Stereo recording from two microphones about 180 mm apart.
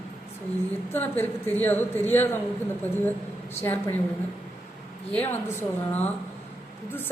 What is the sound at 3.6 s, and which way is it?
Speech, 10° left (ahead or behind).